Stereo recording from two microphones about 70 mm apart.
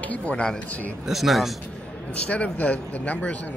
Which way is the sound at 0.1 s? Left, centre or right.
Centre.